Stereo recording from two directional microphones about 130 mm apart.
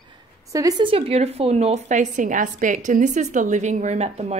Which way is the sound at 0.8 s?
45° right (ahead or behind).